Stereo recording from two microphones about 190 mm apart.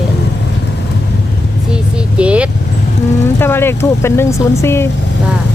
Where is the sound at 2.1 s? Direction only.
5° right (ahead or behind).